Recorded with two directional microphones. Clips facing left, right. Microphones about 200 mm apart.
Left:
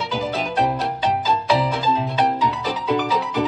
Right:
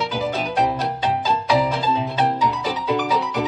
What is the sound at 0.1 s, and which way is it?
Music, centre (ahead or behind).